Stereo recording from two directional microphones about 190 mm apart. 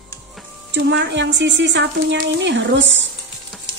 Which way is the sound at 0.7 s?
65° right (ahead or behind).